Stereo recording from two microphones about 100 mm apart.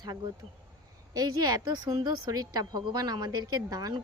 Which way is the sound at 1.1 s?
40° right (ahead or behind).